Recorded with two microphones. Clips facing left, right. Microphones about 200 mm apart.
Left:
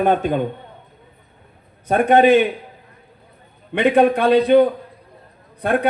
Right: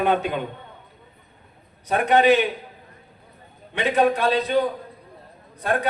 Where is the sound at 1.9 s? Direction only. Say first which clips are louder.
Left 5 dB; 50° left (ahead or behind).